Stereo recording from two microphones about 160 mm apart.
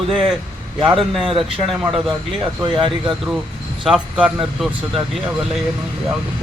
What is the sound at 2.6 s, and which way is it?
Speech, 30° right (ahead or behind).